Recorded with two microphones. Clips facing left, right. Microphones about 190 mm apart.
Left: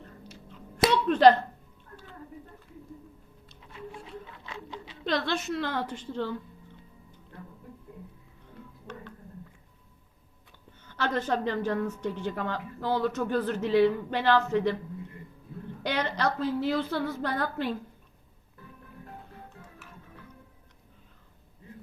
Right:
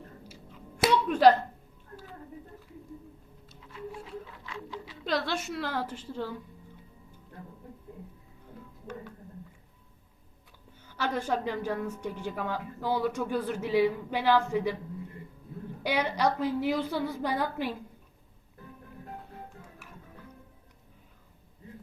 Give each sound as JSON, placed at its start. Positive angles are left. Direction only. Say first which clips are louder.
{"t": 0.3, "sound": "chewing", "louder": "left 1 dB", "side_deg": -5}
{"t": 4.4, "sound": "a sound", "louder": "right 1 dB", "side_deg": 25}
{"t": 5.0, "sound": "a woman's voice", "louder": "left 2 dB", "side_deg": -5}
{"t": 10.8, "sound": "a woman's voice", "louder": "left 2 dB", "side_deg": -10}
{"t": 15.8, "sound": "a woman's voice", "louder": "right 1 dB", "side_deg": -10}